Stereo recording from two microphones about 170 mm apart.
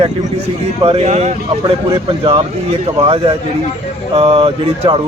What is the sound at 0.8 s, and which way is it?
Speech, 35° right (ahead or behind).